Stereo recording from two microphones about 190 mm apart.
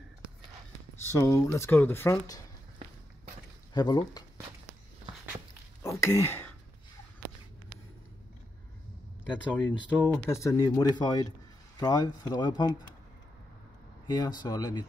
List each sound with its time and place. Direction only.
1.1 s speech: 15° left (ahead or behind)
3.7 s speech: 20° left (ahead or behind)
5.8 s a sound: 15° left (ahead or behind)
9.3 s speech: 10° left (ahead or behind)
14.0 s speech: 20° left (ahead or behind)